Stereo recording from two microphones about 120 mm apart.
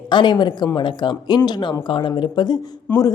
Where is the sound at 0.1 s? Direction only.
40° left (ahead or behind).